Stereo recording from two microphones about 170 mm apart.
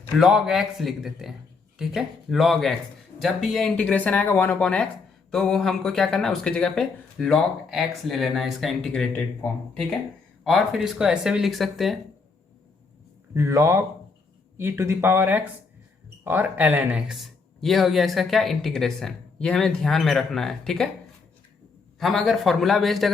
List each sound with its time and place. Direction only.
0.2 s speech: 5° right (ahead or behind)
13.3 s speech: 15° right (ahead or behind); by 20.9 s centre (ahead or behind)
21.9 s speech: centre (ahead or behind)